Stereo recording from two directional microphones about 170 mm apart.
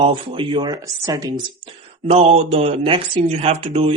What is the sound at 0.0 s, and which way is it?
Speech, 30° right (ahead or behind).